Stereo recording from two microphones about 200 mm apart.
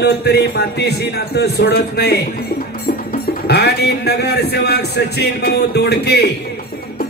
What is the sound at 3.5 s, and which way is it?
A man's voice, 55° left (ahead or behind).